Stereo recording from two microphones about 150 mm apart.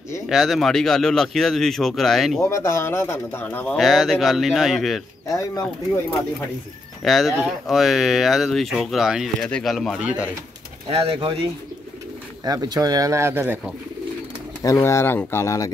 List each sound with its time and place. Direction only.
0.3 s speech: centre (ahead or behind)
2.4 s speech: 20° left (ahead or behind)
3.7 s speech: centre (ahead or behind)
7.0 s speech: centre (ahead or behind)
10.9 s speech: 40° right (ahead or behind)
12.4 s speech: 25° right (ahead or behind)
14.6 s speech: 20° left (ahead or behind)